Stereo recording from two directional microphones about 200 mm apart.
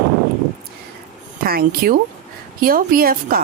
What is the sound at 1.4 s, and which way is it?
Speech, 50° right (ahead or behind).